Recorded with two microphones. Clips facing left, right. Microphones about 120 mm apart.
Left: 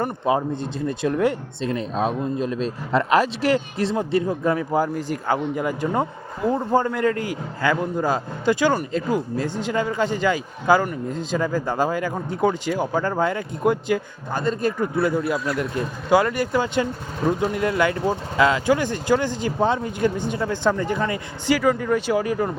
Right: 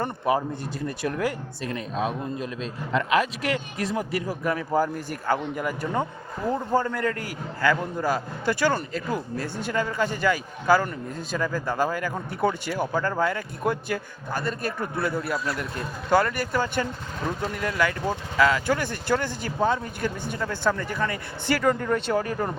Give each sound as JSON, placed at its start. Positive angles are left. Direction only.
{"t": 0.3, "sound": "speech", "side_deg": 25}